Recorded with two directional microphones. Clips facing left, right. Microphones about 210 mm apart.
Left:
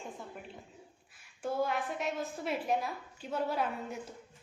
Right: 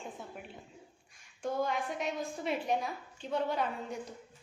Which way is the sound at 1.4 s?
5° left (ahead or behind).